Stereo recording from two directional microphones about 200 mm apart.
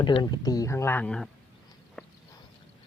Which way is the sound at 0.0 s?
20° left (ahead or behind).